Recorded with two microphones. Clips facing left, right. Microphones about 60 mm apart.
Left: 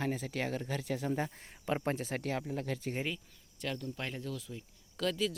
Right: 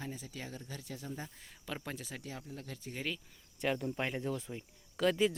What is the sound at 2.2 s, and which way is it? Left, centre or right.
Speech, left.